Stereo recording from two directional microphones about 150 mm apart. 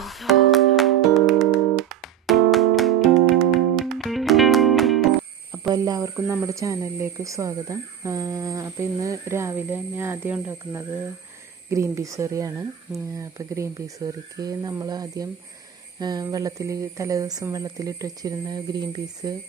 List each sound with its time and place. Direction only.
0.0 s music: centre (ahead or behind)
5.5 s speech: 25° right (ahead or behind)